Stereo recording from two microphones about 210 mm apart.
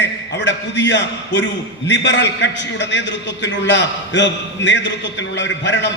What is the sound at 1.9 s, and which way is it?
A man's voice, 60° left (ahead or behind).